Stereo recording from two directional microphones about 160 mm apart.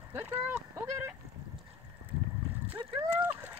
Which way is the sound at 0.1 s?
15° right (ahead or behind).